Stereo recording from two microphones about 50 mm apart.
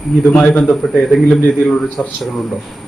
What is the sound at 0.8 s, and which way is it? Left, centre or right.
Speech, centre.